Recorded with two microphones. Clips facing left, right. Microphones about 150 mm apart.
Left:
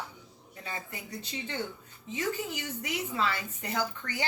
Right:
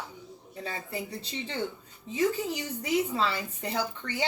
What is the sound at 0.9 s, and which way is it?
A woman's voice, 30° right (ahead or behind).